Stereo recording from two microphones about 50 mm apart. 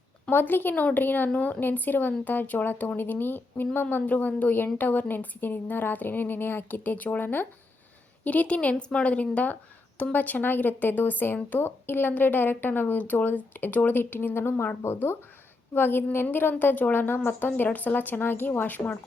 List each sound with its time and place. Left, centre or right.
0.3 s a woman's voice: left
4.0 s a woman's voice: left
8.2 s a woman's voice: left